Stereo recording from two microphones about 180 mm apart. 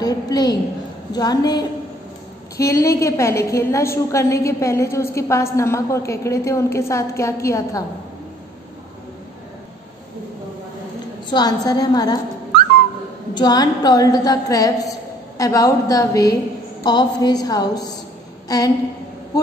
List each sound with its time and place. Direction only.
0.0 s a woman's voice: 20° left (ahead or behind)
11.2 s a woman's voice: 20° left (ahead or behind)
13.3 s a woman's voice: 25° left (ahead or behind)